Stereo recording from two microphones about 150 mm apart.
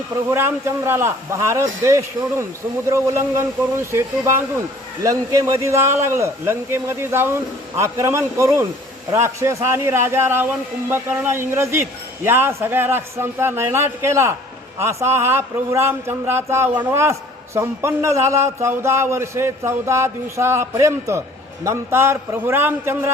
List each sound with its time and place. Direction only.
0.3 s a man's voice: 15° right (ahead or behind)